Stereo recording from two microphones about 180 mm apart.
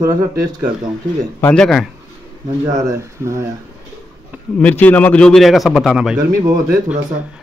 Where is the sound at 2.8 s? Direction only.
15° right (ahead or behind).